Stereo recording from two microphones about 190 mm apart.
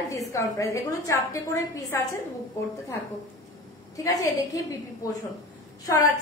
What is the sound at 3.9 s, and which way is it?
Speech, 15° left (ahead or behind).